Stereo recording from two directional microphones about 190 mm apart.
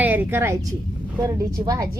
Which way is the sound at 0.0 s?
10° right (ahead or behind).